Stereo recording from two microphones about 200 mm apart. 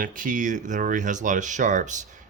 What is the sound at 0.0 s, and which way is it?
Speech, 40° right (ahead or behind).